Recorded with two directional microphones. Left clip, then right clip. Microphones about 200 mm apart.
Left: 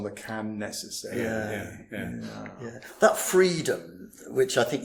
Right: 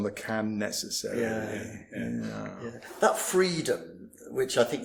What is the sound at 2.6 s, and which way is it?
Speech, 30° left (ahead or behind).